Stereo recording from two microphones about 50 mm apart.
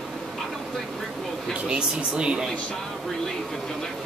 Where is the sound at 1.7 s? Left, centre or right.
Centre.